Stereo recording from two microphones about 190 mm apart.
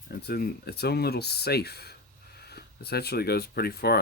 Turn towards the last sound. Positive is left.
turn(degrees=55)  # may be behind; listen again after turning